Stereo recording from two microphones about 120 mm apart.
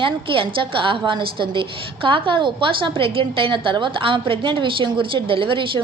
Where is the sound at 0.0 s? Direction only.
45° right (ahead or behind).